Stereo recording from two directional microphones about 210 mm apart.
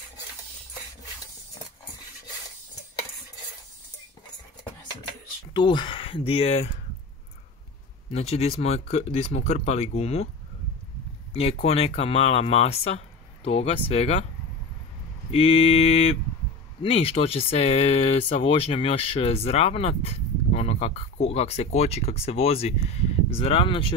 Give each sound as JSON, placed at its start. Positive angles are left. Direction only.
{"t": 5.5, "sound": "speech", "side_deg": 20}
{"t": 8.1, "sound": "speech", "side_deg": 30}
{"t": 11.6, "sound": "speech", "side_deg": 30}
{"t": 15.3, "sound": "speech", "side_deg": 25}